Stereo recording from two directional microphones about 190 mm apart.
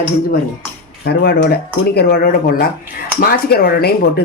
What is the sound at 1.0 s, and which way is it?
Speech, 55° left (ahead or behind).